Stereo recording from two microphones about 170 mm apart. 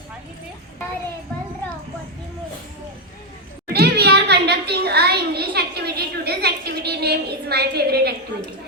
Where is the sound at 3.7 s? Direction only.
70° right (ahead or behind).